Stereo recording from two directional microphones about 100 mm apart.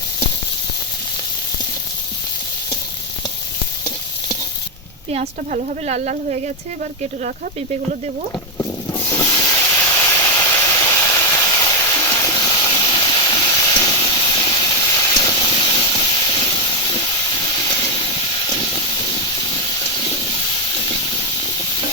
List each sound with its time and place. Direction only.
5.8 s speech: 90° right
8.5 s hiss: 30° left (ahead or behind)
10.6 s vehicle: 30° left (ahead or behind)
12.0 s vehicle: 25° left (ahead or behind)
12.3 s steam: 45° left (ahead or behind)
14.3 s engine: 40° left (ahead or behind)
15.2 s steam: 40° left (ahead or behind)
16.4 s vehicle: 50° left (ahead or behind)